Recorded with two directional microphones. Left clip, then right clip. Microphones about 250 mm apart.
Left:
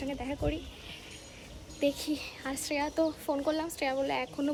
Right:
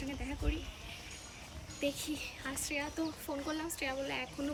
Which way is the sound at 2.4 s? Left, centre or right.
Centre.